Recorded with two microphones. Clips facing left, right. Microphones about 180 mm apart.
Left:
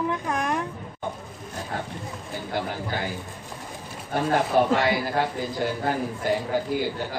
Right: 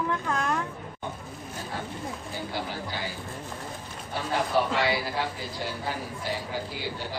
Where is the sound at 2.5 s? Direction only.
50° left (ahead or behind).